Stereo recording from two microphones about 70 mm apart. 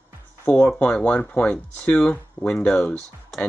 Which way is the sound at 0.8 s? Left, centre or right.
Centre.